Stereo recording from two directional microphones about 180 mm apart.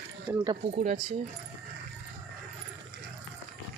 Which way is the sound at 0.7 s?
35° right (ahead or behind).